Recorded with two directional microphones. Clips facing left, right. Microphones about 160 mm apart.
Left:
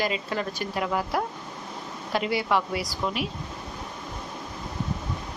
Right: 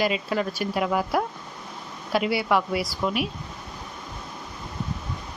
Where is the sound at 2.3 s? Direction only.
10° right (ahead or behind).